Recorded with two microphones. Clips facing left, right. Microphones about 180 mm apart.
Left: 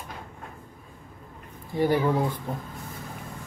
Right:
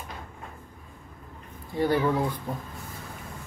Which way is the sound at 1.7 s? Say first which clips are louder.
Left 1 dB; 10° left (ahead or behind).